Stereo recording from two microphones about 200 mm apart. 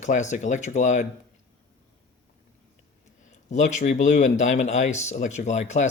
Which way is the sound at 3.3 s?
35° left (ahead or behind).